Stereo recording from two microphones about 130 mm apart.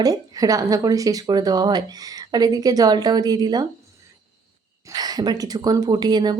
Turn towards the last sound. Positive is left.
turn(degrees=-30)  # may be behind; listen again after turning